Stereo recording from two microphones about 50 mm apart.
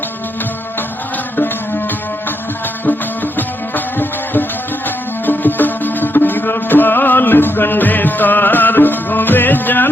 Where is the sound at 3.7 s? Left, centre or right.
Left.